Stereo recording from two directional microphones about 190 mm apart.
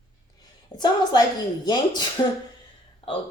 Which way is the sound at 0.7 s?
20° left (ahead or behind).